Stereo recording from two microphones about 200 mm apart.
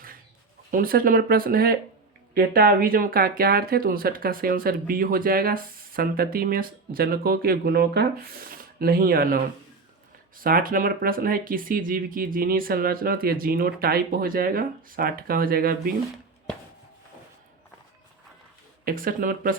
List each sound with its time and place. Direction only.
0.7 s speech: 45° right (ahead or behind)
18.9 s speech: 45° right (ahead or behind)